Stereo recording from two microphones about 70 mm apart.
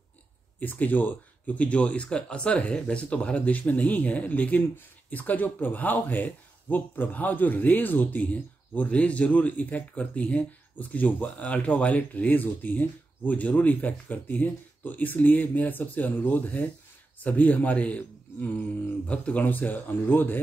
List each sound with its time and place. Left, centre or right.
0.6 s speech: left